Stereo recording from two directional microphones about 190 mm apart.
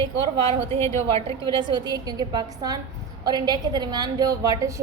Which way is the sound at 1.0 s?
30° right (ahead or behind).